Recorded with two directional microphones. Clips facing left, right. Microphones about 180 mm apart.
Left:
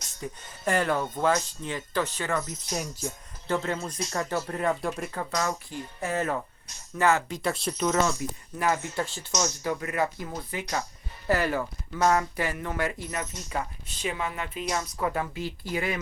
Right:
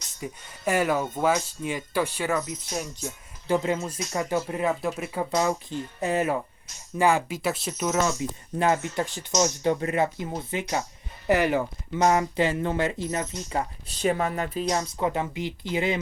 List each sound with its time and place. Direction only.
0.2 s speech: 10° right (ahead or behind)
3.4 s speech: 15° right (ahead or behind)
5.3 s speech: 20° right (ahead or behind)
8.2 s speech: 25° right (ahead or behind)
14.9 s speech: 20° right (ahead or behind)